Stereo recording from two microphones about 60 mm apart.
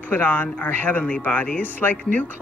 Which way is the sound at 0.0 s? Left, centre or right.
Left.